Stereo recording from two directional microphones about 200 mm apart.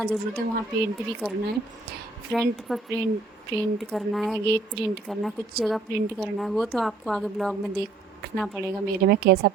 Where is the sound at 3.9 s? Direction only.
Centre (ahead or behind).